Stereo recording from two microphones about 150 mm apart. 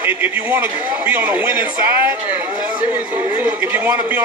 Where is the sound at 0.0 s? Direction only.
10° right (ahead or behind).